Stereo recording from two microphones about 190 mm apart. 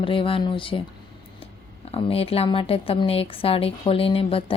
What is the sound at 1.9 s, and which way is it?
Speech, 30° left (ahead or behind).